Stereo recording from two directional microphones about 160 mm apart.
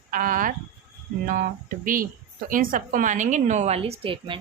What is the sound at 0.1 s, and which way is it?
A woman's voice, 60° right (ahead or behind).